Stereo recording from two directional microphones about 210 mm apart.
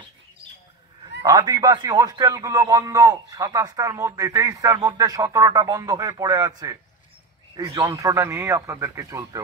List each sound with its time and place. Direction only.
1.2 s a man's voice: 20° right (ahead or behind)